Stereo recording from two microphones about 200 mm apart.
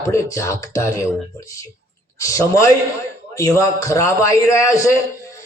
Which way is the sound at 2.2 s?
15° left (ahead or behind).